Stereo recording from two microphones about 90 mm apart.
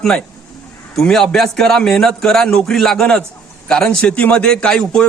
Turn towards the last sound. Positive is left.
turn(degrees=10)  # may be behind; listen again after turning